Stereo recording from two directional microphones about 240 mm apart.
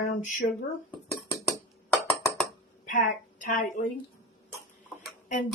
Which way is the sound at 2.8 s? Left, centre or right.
Left.